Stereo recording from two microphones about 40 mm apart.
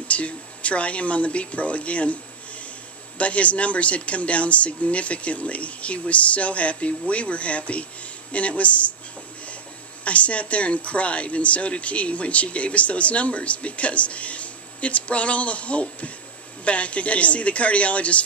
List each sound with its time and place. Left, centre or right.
0.1 s speech: left
3.2 s speech: left
10.0 s speech: left